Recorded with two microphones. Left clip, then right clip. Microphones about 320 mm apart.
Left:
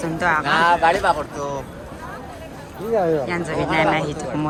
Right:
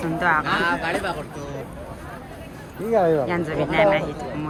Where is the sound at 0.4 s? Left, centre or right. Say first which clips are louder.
Left 7 dB; left.